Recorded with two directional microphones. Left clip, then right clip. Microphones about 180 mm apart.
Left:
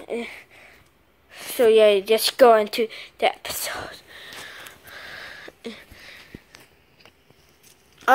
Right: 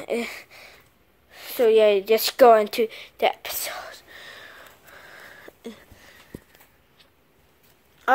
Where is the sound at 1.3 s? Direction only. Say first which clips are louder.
Left 2 dB; centre (ahead or behind).